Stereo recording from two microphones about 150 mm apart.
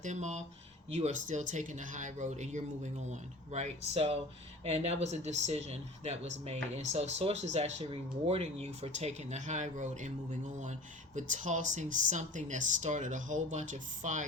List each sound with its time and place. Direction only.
0.0 s speech: 50° right (ahead or behind)